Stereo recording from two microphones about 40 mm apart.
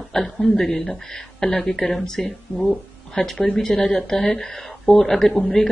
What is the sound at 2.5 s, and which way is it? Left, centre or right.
Speech, centre.